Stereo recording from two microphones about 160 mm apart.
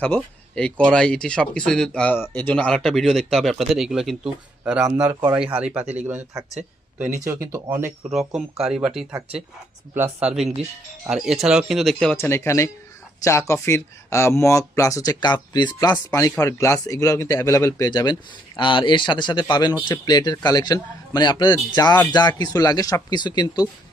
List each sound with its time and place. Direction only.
0.0 s speech: 5° left (ahead or behind); by 6.4 s 10° right (ahead or behind)
7.4 s speech: 15° right (ahead or behind)
8.1 s speech: centre (ahead or behind)
12.1 s speech: 15° left (ahead or behind)